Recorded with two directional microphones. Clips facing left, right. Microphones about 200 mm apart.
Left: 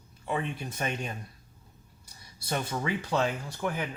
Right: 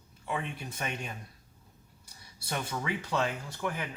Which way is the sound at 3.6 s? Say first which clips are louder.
Left 2 dB; 45° left (ahead or behind).